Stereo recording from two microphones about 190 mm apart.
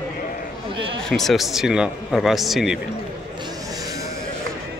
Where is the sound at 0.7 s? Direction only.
25° right (ahead or behind).